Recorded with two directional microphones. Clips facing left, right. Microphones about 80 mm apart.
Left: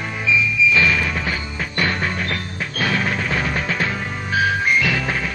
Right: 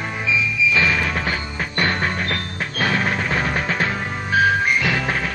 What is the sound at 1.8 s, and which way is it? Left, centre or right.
Music, right.